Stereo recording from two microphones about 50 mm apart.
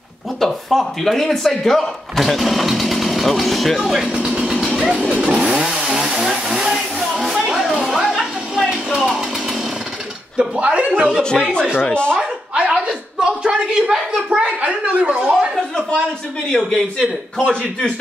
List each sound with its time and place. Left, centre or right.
0.4 s speech: centre
4.2 s vehicle: centre
5.2 s chainsaw: centre
7.8 s a sound: centre
8.5 s a sound: centre
9.0 s chainsaw: centre
10.5 s speech: right
11.8 s a man's voice: left
12.2 s a sound: centre
13.2 s speech: centre
14.1 s speech: right
15.5 s speech: centre
17.0 s a man's voice: left